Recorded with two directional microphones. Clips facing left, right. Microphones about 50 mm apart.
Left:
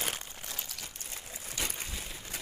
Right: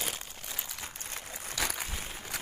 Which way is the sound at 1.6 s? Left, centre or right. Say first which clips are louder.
Right 5 dB; right.